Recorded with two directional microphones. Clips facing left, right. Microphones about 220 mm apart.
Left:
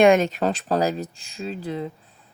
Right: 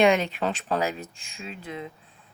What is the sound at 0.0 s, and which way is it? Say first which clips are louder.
Speech: left 5 dB; 45° left (ahead or behind).